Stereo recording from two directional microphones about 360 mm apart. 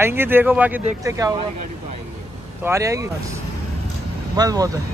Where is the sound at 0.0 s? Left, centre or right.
Centre.